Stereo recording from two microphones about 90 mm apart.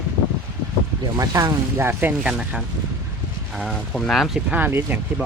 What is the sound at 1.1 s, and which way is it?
Speech, 40° right (ahead or behind).